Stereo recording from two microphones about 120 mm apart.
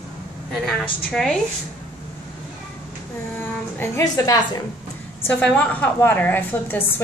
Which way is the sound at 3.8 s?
30° left (ahead or behind).